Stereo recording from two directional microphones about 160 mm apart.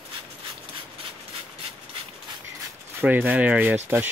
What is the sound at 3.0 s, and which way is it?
Speech, 10° right (ahead or behind).